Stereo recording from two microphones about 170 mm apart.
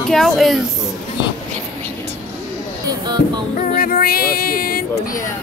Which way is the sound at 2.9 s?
25° right (ahead or behind).